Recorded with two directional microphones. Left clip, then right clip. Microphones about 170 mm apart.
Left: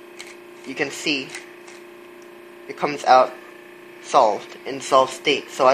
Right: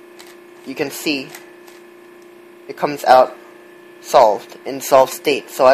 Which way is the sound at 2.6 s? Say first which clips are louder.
Right 4 dB; 50° right (ahead or behind).